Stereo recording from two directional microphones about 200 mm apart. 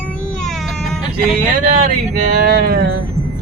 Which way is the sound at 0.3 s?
Centre (ahead or behind).